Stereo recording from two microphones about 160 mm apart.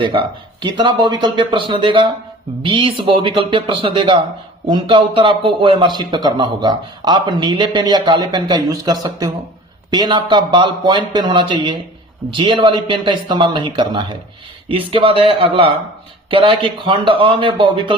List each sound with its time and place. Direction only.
0.0 s speech: 30° right (ahead or behind)